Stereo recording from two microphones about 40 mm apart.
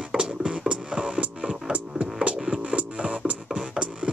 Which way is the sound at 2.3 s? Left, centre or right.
Centre.